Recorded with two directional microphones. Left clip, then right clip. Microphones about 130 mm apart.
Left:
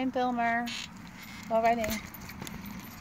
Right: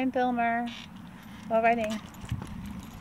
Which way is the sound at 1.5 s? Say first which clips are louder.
Right 2 dB; 15° right (ahead or behind).